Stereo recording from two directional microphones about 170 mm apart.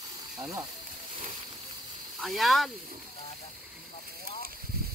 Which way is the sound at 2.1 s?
Centre (ahead or behind).